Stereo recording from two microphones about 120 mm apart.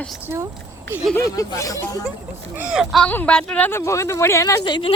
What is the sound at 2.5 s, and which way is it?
Speech, 10° right (ahead or behind).